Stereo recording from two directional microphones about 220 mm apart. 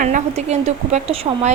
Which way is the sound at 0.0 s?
35° right (ahead or behind).